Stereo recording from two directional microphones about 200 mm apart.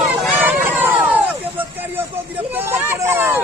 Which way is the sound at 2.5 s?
10° right (ahead or behind).